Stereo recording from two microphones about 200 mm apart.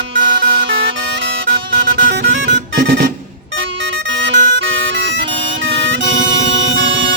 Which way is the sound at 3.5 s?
65° right (ahead or behind).